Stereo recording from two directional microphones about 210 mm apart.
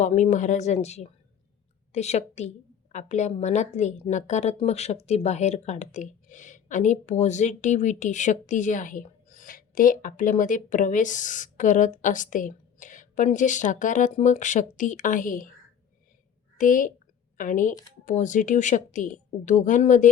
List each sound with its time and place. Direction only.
0.0 s a woman's voice: 35° left (ahead or behind)
16.6 s a woman's voice: 40° left (ahead or behind)